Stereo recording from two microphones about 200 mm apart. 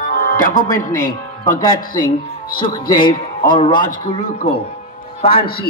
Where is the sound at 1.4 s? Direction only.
45° left (ahead or behind).